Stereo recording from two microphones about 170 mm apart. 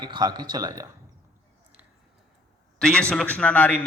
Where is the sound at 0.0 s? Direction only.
25° right (ahead or behind).